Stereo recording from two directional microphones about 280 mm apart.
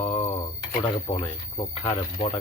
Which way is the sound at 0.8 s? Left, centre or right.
Left.